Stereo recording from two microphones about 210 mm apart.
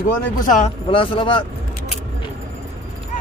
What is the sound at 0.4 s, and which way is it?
Speech, 40° left (ahead or behind).